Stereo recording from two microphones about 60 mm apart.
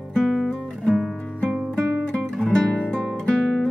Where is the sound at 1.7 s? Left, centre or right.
Centre.